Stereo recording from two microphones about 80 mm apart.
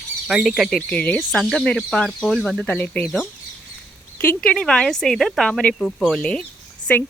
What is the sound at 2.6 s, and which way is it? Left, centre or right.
Speech, centre.